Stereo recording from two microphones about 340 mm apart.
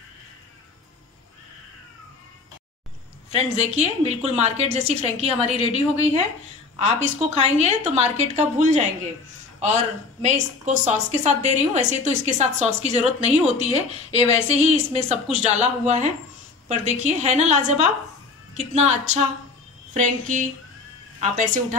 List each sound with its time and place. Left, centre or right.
3.3 s a woman's voice: centre
10.2 s a woman's voice: right